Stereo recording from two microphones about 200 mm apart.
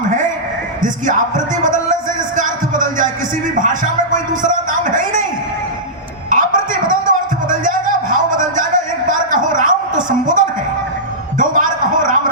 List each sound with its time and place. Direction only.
1.6 s music: 40° right (ahead or behind)
3.6 s a man's voice: 40° right (ahead or behind)
6.3 s music: 40° right (ahead or behind)
11.3 s a sound: 40° right (ahead or behind)